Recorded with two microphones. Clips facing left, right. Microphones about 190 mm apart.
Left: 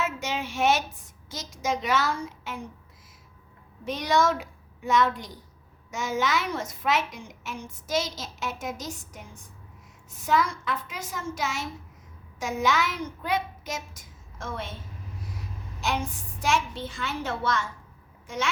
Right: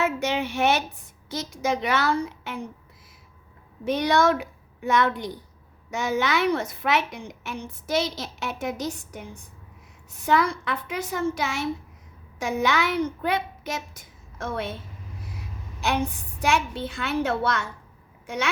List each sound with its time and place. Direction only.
0.0 s a sound: 60° right (ahead or behind)
1.3 s a woman's voice: 60° right (ahead or behind)
3.8 s a woman's voice: 60° right (ahead or behind)
15.8 s a woman's voice: 60° right (ahead or behind)